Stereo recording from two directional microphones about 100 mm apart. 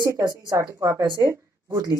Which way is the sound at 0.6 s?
30° right (ahead or behind).